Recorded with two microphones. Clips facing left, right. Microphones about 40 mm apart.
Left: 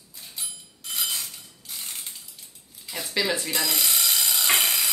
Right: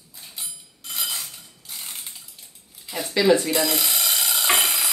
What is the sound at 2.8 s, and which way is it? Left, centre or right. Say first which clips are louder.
A woman's voice: right 8 dB; centre.